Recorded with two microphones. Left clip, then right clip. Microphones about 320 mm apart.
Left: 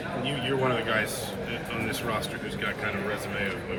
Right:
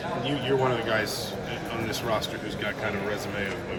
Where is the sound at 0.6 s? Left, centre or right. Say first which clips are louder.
Right 1 dB; right.